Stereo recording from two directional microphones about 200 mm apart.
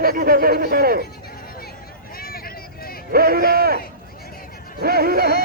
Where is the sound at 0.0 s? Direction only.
45° right (ahead or behind).